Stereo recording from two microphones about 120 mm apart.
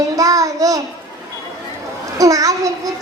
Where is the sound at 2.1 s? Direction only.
30° right (ahead or behind).